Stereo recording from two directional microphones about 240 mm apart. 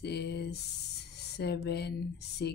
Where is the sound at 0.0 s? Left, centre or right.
Left.